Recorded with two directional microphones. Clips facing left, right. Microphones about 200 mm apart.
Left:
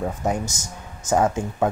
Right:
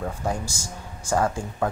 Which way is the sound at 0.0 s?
20° left (ahead or behind).